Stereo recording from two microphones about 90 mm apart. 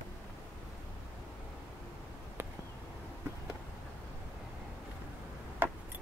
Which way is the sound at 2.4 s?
25° right (ahead or behind).